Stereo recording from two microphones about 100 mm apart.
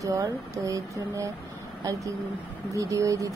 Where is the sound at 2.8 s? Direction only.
35° right (ahead or behind).